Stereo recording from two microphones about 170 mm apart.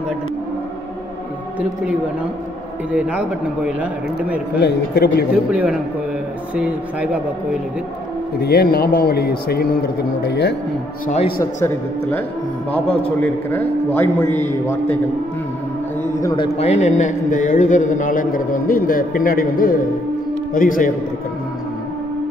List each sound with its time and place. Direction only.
2.9 s speech: 10° right (ahead or behind)
4.6 s a man's voice: 70° left (ahead or behind)
5.5 s speech: 5° right (ahead or behind)
8.4 s a man's voice: 70° left (ahead or behind)
13.2 s a man's voice: 10° left (ahead or behind)
16.2 s a man's voice: 20° left (ahead or behind)
16.5 s a man's voice: 40° left (ahead or behind)